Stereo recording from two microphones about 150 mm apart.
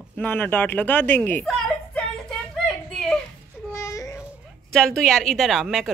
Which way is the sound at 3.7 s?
20° left (ahead or behind).